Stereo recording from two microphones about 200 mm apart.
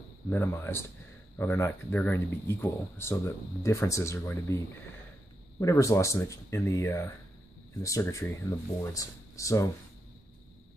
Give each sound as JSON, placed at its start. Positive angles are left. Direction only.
{"t": 0.3, "sound": "speech", "side_deg": 10}